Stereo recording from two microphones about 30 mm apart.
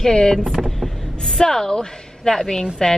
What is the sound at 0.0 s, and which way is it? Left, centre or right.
Speech, left.